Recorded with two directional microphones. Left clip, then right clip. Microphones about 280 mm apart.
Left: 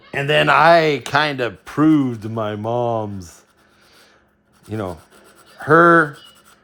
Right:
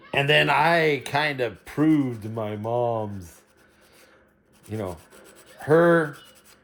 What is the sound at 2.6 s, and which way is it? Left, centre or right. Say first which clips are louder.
Speech: left 3 dB; left.